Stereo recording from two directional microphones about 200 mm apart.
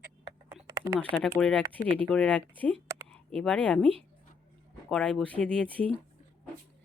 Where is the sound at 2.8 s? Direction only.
15° right (ahead or behind).